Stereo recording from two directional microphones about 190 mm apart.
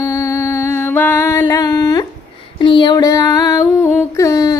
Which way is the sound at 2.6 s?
25° left (ahead or behind).